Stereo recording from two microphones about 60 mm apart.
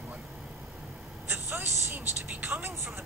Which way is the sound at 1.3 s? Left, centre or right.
Right.